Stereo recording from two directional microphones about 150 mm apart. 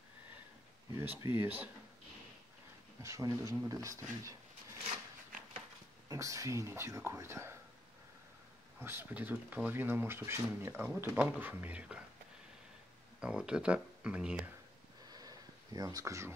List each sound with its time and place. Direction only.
1.0 s speech: 15° right (ahead or behind)
3.0 s speech: 20° right (ahead or behind)
6.0 s speech: 20° right (ahead or behind)
8.7 s speech: 15° right (ahead or behind)
13.2 s speech: 5° right (ahead or behind)
15.0 s a sound: 25° right (ahead or behind)